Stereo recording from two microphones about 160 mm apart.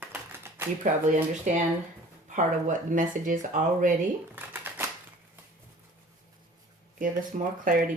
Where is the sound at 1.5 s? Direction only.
50° right (ahead or behind).